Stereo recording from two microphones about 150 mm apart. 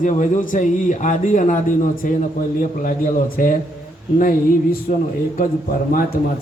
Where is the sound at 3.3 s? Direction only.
70° left (ahead or behind).